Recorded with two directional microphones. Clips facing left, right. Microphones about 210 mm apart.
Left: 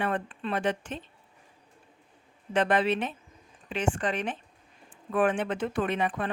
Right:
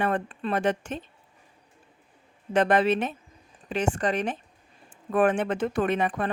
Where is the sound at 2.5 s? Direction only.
45° right (ahead or behind).